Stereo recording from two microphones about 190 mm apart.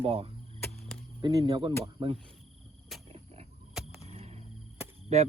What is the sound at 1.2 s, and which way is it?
Speech, 20° right (ahead or behind).